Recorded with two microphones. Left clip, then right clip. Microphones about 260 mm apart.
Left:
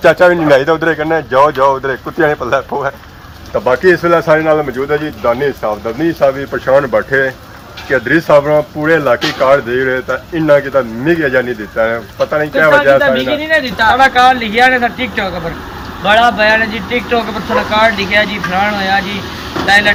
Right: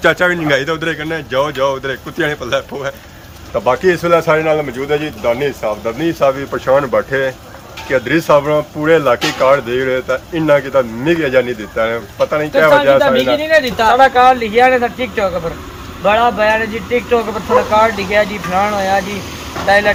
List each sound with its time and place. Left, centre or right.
0.0 s speech: centre
13.4 s speech: right
14.0 s speech: right